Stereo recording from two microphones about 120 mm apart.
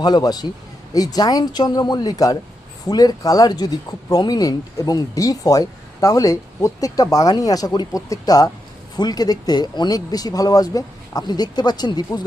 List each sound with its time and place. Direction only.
0.0 s speech: 35° left (ahead or behind)